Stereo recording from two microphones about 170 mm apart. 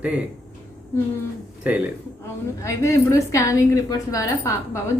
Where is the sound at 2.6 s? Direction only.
15° left (ahead or behind).